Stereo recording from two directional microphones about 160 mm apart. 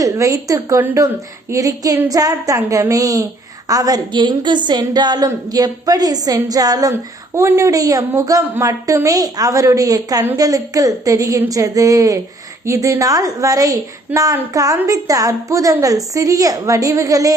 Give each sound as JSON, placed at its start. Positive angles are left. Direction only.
{"t": 0.0, "sound": "a woman's voice", "side_deg": -20}